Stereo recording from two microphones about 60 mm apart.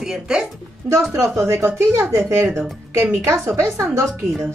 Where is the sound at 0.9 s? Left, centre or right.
Right.